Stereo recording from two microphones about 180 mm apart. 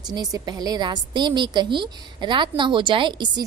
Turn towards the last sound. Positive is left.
turn(degrees=-25)  # may be behind; listen again after turning